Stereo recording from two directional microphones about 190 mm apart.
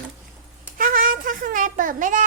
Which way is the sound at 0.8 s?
45° right (ahead or behind).